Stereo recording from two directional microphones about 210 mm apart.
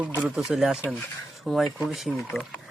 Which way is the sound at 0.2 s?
5° right (ahead or behind).